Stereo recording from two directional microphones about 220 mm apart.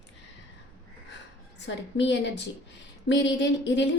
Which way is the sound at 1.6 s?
55° left (ahead or behind).